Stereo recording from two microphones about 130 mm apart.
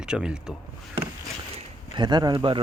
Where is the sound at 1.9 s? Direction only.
35° right (ahead or behind).